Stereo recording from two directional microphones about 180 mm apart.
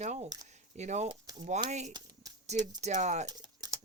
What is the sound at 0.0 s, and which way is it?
Speech, 40° right (ahead or behind).